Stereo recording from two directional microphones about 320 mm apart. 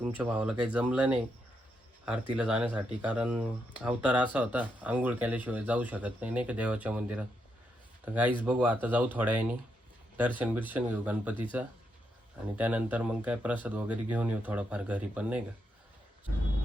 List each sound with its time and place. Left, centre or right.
0.0 s speech: centre
2.3 s speech: centre
12.5 s speech: centre